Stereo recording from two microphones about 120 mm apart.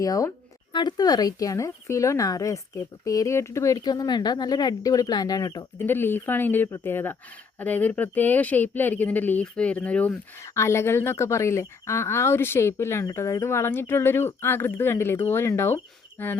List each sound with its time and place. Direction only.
0.0 s a woman's voice: 30° left (ahead or behind)
5.8 s speech: 20° left (ahead or behind)
10.4 s a woman's voice: 25° left (ahead or behind)